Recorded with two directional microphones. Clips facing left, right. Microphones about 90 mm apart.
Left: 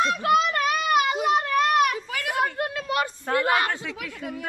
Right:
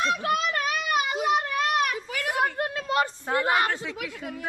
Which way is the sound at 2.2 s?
30° right (ahead or behind).